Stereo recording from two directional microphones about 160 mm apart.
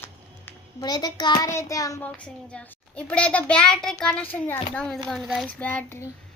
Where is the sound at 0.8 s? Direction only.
25° left (ahead or behind).